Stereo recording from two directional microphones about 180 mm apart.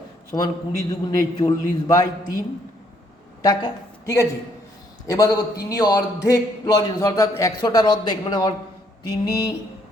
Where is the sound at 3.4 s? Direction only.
20° left (ahead or behind).